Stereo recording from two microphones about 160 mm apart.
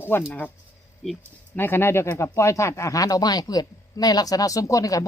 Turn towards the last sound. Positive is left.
turn(degrees=20)  # may be behind; listen again after turning